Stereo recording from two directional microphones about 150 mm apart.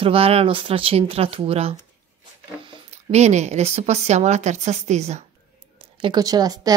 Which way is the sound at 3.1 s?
50° right (ahead or behind).